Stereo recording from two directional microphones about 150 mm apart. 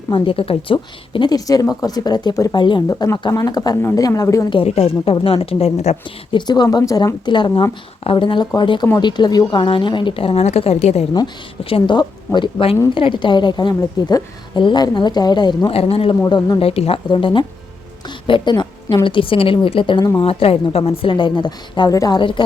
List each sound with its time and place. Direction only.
0.1 s a woman's voice: 35° left (ahead or behind)
4.5 s a woman's voice: 45° left (ahead or behind)
6.1 s a woman's voice: 30° left (ahead or behind); by 11.0 s 45° left (ahead or behind)
11.1 s a woman's voice: 35° left (ahead or behind)
16.2 s a woman's voice: 25° left (ahead or behind)
16.6 s a woman's voice: 40° left (ahead or behind)